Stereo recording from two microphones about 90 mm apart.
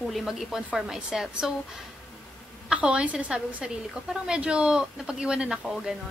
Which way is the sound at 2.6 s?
10° right (ahead or behind).